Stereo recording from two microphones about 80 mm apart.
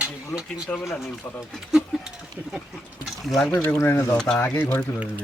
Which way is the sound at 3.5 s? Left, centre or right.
Left.